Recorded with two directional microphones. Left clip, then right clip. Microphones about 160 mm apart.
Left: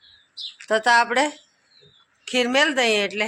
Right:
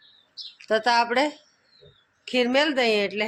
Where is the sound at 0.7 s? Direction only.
15° left (ahead or behind).